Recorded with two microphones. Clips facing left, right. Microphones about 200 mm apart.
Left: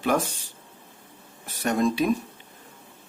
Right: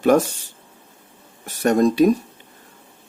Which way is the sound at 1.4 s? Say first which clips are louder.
Right 7 dB; 45° right (ahead or behind).